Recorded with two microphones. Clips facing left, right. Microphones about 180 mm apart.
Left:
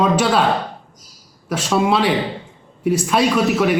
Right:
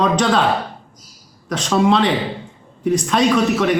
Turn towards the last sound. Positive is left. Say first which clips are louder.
# even
turn(degrees=5)  # may be behind; listen again after turning